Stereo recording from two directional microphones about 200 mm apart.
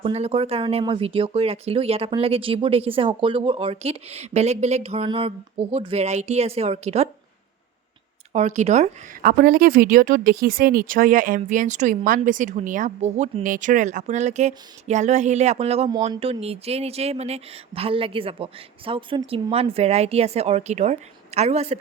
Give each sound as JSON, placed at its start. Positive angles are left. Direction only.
{"t": 0.0, "sound": "speech", "side_deg": -30}
{"t": 8.3, "sound": "speech", "side_deg": -35}